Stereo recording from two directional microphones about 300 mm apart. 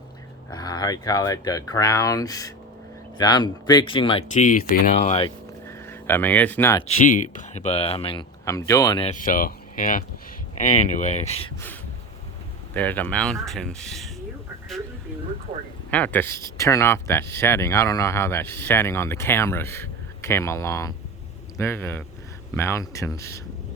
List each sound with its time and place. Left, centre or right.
0.5 s speech: centre
5.6 s speech: centre
7.1 s speech: left
12.7 s speech: centre
15.9 s speech: centre